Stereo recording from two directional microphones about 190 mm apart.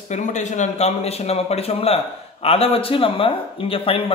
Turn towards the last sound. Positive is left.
turn(degrees=30)  # may be behind; listen again after turning